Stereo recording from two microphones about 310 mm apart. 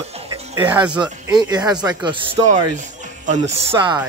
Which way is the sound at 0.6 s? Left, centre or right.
Centre.